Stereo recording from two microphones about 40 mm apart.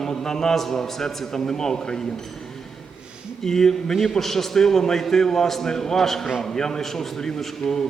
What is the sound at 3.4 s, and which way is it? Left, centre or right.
A man's voice, centre.